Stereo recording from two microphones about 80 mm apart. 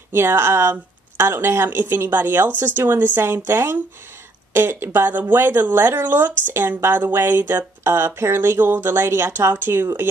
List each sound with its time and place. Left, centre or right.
0.1 s speech: right